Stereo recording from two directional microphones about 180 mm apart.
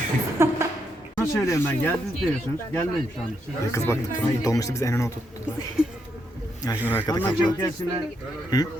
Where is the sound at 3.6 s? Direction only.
15° left (ahead or behind).